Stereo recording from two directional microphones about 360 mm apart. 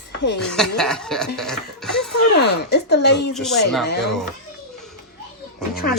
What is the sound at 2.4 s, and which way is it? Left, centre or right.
Speech, left.